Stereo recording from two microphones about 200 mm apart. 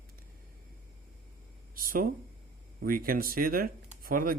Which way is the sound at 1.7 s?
45° right (ahead or behind).